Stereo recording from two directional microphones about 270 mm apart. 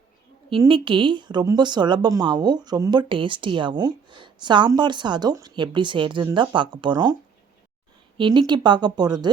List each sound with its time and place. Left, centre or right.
0.6 s a woman's voice: centre
8.2 s a woman's voice: centre